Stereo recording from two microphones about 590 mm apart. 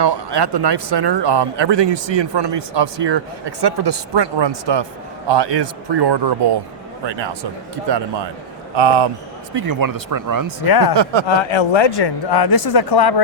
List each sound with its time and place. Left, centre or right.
0.0 s speech: right
9.6 s speech: right
10.6 s speech: left
10.9 s speech: right
11.3 s a man's voice: left